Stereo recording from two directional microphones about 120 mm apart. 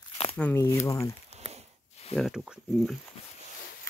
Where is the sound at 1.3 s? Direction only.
60° right (ahead or behind).